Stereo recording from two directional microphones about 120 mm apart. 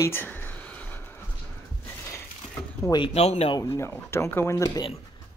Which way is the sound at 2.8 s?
40° left (ahead or behind).